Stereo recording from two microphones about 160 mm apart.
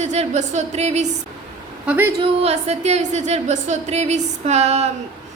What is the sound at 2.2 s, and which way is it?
A woman's voice, 40° right (ahead or behind).